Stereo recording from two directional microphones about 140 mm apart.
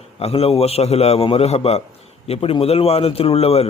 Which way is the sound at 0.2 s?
45° left (ahead or behind).